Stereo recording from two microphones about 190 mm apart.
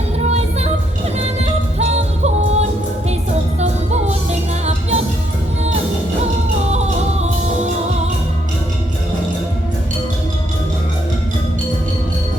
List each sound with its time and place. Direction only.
1.2 s music: 35° right (ahead or behind)
6.7 s music: 35° right (ahead or behind)